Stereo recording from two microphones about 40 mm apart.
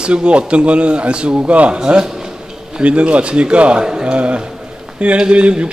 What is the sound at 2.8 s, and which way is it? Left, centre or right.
A man's voice, right.